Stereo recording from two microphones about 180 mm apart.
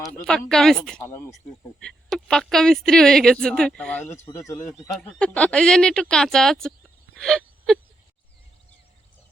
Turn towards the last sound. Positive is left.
turn(degrees=0)  # may be behind; listen again after turning